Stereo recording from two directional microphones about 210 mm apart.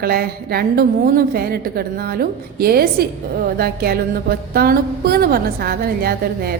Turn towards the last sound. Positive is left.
turn(degrees=-45)  # may be behind; listen again after turning